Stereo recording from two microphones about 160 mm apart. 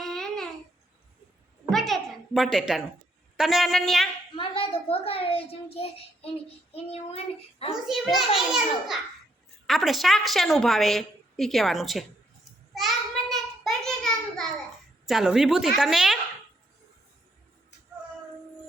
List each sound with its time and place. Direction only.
0.0 s babbling: centre (ahead or behind)
1.7 s a woman's voice: centre (ahead or behind)
4.4 s a child's voice: 35° left (ahead or behind)
7.9 s a woman's voice: centre (ahead or behind)
12.7 s a sound: centre (ahead or behind)
15.0 s a woman's voice: 5° right (ahead or behind)